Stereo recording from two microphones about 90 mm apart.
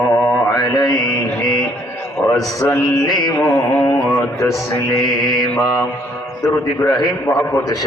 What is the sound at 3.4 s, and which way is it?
Mantra, 35° left (ahead or behind).